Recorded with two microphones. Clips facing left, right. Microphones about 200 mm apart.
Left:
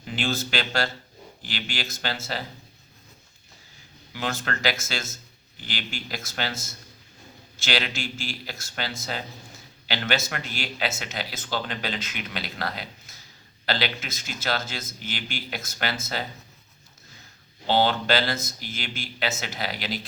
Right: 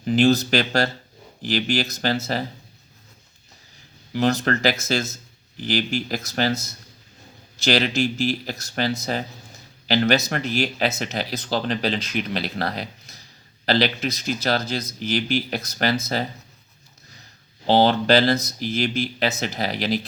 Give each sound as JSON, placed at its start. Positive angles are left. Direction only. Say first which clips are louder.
{"t": 0.2, "sound": "speech", "louder": "right 10 dB", "side_deg": -40}
{"t": 4.1, "sound": "speech", "louder": "right 10 dB", "side_deg": -40}
{"t": 17.7, "sound": "speech", "louder": "right 6 dB", "side_deg": -40}